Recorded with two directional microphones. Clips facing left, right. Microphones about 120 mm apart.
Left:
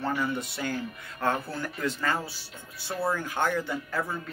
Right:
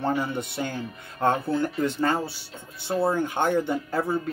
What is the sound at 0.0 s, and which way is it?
Speech, 30° right (ahead or behind).